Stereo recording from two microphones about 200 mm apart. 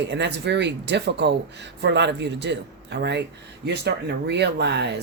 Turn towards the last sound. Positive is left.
turn(degrees=-60)  # may be behind; listen again after turning